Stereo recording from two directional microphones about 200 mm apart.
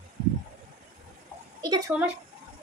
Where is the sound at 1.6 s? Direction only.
20° right (ahead or behind).